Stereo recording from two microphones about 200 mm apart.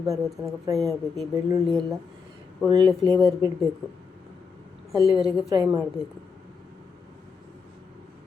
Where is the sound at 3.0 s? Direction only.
20° right (ahead or behind).